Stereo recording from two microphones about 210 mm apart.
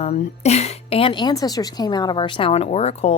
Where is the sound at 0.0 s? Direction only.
30° left (ahead or behind).